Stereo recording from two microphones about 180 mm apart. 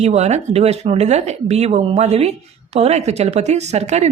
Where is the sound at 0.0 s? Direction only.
40° right (ahead or behind).